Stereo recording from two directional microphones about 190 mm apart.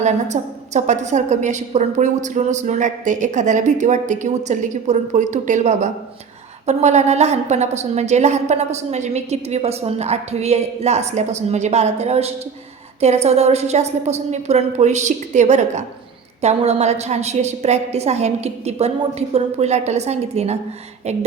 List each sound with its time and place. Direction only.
0.0 s a woman's voice: 40° right (ahead or behind)